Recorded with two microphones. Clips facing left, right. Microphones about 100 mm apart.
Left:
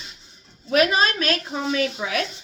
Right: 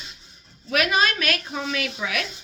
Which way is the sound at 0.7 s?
35° left (ahead or behind).